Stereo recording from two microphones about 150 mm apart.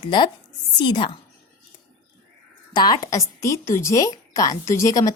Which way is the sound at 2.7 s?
25° left (ahead or behind).